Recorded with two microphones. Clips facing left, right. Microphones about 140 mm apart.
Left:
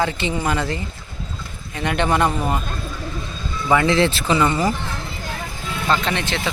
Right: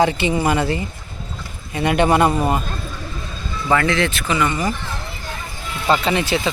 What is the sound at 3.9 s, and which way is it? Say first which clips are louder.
Speech: left 3 dB; 30° left (ahead or behind).